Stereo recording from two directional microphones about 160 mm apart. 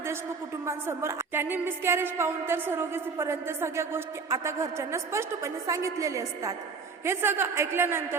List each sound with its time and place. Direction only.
0.6 s a woman's voice: 15° right (ahead or behind)